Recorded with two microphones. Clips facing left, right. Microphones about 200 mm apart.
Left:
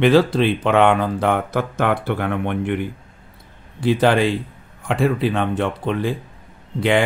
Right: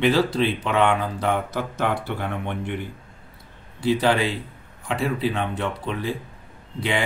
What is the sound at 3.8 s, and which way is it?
Speech, 55° left (ahead or behind).